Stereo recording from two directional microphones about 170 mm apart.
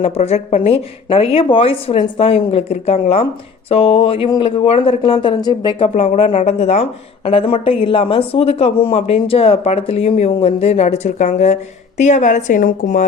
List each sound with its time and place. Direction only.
0.0 s speech: 35° left (ahead or behind)
5.9 s a woman's voice: 40° left (ahead or behind)